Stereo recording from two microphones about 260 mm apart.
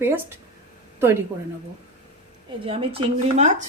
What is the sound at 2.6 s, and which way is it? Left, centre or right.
A woman's voice, right.